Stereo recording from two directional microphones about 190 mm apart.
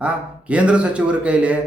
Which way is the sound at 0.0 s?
5° right (ahead or behind).